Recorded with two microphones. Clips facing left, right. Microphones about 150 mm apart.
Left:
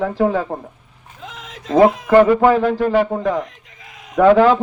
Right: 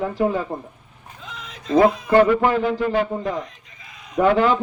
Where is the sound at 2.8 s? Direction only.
55° left (ahead or behind).